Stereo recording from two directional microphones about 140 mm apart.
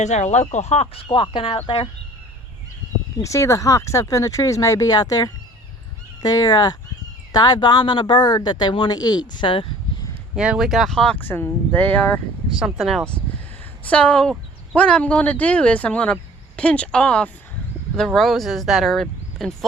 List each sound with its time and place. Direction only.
0.0 s speech: 55° left (ahead or behind); by 1.9 s 40° left (ahead or behind)
3.2 s speech: 20° left (ahead or behind); by 9.7 s 40° left (ahead or behind)
10.3 s speech: 5° right (ahead or behind); by 12.2 s 10° left (ahead or behind)
12.5 s speech: centre (ahead or behind)